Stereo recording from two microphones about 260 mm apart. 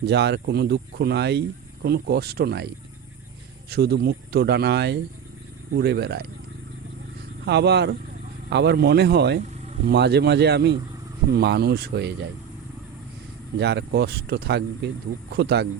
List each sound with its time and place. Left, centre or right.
0.0 s speech: right
7.4 s speech: right
13.6 s speech: right